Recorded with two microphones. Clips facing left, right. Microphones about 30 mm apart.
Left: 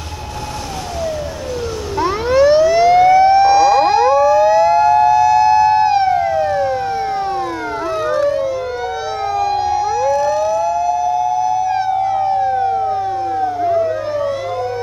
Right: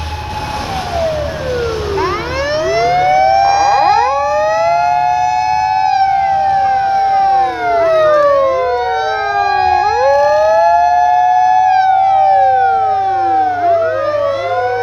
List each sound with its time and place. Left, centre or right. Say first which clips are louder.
2.0 s siren: left 7 dB; right
6.1 s emergency vehicle: right 4 dB; right
9.3 s siren: right 4 dB; right
13.3 s emergency vehicle: right 3 dB; right